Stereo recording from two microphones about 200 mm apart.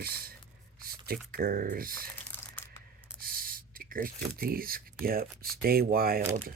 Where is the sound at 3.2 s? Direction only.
45° right (ahead or behind).